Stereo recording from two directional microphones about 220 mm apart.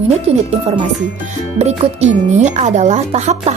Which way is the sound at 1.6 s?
30° right (ahead or behind).